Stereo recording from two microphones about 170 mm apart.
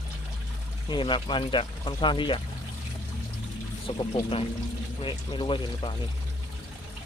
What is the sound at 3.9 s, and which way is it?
Speech, 35° left (ahead or behind).